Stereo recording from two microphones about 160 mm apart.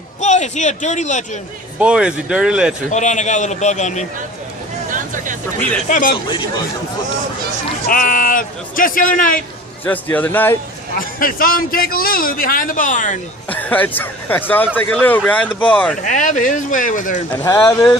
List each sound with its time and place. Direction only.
0.2 s a man's voice: 45° left (ahead or behind)
1.8 s speech: 5° right (ahead or behind)
2.9 s speech: 50° left (ahead or behind)
4.9 s a sound: 55° right (ahead or behind)
5.9 s a man's voice: 60° left (ahead or behind)
7.9 s a man's voice: 60° left (ahead or behind)
9.8 s speech: 10° left (ahead or behind)
10.9 s a man's voice: 60° left (ahead or behind)
13.5 s speech: 10° left (ahead or behind)
16.0 s speech: 50° left (ahead or behind)
17.3 s speech: 15° left (ahead or behind)